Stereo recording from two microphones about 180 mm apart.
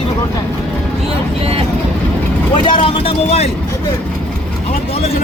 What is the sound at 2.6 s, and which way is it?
Speech, 30° left (ahead or behind).